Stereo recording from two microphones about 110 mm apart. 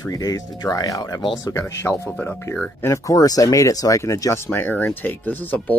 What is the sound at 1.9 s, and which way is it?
Speech, 10° right (ahead or behind).